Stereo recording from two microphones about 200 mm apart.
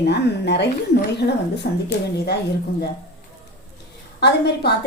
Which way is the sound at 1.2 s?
45° left (ahead or behind).